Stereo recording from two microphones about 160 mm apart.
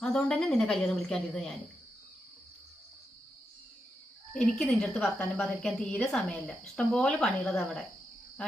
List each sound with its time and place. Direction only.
0.0 s a woman's voice: 5° left (ahead or behind)
4.4 s a woman's voice: 5° left (ahead or behind)